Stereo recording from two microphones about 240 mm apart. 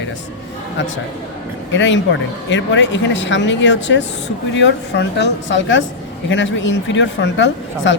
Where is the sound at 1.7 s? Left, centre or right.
Left.